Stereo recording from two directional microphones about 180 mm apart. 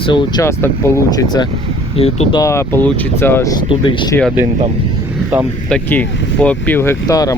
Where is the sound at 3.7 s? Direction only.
30° left (ahead or behind).